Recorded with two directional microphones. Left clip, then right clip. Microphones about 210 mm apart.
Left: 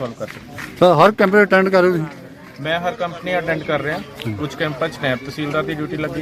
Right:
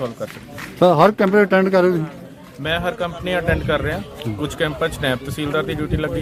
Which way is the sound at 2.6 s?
25° right (ahead or behind).